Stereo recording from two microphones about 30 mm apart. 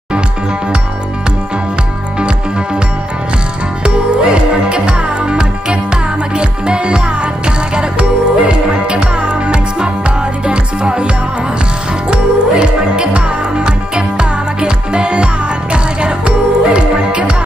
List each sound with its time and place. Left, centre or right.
2.1 s music: right
3.8 s music: right
12.1 s music: right